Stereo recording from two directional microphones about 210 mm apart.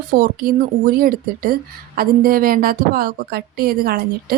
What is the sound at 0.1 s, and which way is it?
Speech, 45° right (ahead or behind).